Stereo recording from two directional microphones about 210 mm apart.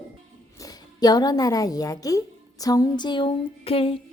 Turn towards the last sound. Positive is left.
turn(degrees=25)  # may be behind; listen again after turning